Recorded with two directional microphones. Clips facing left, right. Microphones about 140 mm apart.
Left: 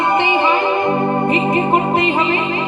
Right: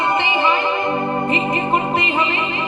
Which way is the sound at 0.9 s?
25° left (ahead or behind).